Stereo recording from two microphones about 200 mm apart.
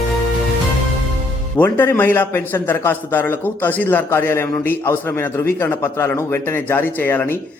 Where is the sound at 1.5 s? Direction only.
10° left (ahead or behind).